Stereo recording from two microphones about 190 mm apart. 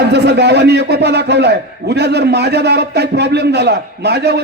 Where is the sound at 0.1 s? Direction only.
60° right (ahead or behind).